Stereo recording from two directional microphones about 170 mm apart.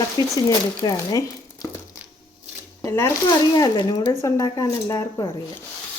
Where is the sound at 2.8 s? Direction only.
15° left (ahead or behind).